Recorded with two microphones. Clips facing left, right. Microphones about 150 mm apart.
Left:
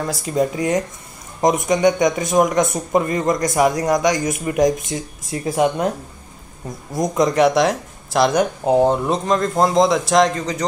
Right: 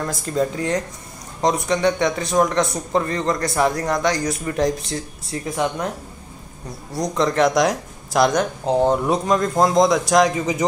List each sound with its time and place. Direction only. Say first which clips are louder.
0.0 s a man's voice: left 2 dB; 10° left (ahead or behind)
6.9 s speech: left 3 dB; 15° left (ahead or behind); by 10.6 s 10° right (ahead or behind)